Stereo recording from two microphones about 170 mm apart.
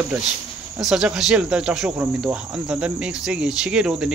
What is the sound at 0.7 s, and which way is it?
Speech, 5° right (ahead or behind).